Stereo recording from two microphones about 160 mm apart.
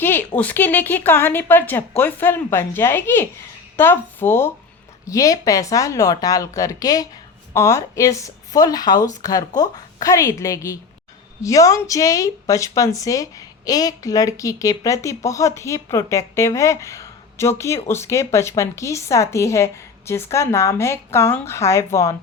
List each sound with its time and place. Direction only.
0.0 s a woman's voice: 15° left (ahead or behind)